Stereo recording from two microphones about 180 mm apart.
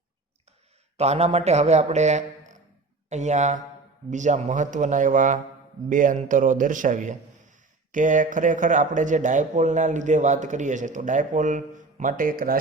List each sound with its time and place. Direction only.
0.9 s a man's voice: 35° right (ahead or behind); by 12.5 s 55° right (ahead or behind)